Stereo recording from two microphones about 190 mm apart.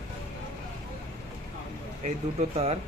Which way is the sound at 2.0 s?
35° right (ahead or behind).